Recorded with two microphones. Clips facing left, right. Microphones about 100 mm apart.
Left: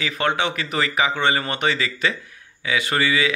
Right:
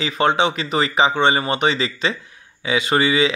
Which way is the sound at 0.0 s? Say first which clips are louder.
Right 5 dB; 20° right (ahead or behind).